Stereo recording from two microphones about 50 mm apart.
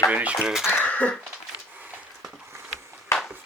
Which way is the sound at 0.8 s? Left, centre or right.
Left.